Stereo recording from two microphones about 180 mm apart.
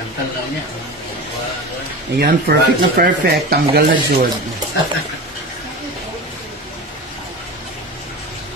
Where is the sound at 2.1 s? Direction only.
60° right (ahead or behind).